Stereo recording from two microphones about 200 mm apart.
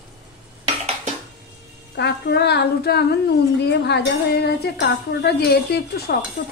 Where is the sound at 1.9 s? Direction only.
55° left (ahead or behind).